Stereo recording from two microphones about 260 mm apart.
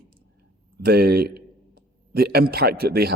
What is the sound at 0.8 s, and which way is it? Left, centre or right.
A man's voice, right.